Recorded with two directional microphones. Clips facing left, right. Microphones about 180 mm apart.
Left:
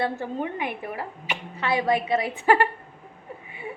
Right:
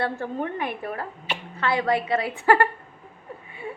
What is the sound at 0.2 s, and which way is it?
A woman's voice, 15° left (ahead or behind).